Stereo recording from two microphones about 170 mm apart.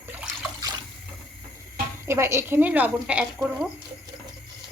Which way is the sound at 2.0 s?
15° right (ahead or behind).